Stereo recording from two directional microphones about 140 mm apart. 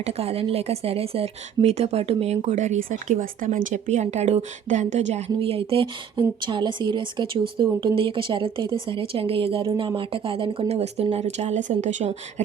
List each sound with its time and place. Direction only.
0.0 s a woman's voice: 45° right (ahead or behind)